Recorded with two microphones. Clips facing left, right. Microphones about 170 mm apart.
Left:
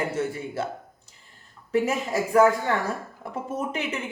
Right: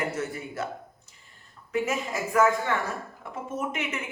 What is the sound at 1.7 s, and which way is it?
Speech, 35° left (ahead or behind).